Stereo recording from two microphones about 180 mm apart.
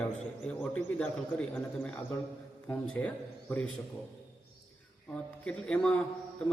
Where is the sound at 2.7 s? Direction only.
10° left (ahead or behind).